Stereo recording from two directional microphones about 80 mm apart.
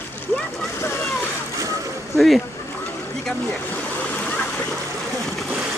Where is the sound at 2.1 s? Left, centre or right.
Centre.